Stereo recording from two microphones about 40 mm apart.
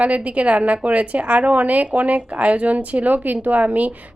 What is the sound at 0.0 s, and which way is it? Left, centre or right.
A woman's voice, right.